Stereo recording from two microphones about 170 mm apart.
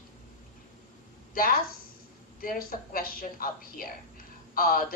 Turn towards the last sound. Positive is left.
turn(degrees=60)  # may be behind; listen again after turning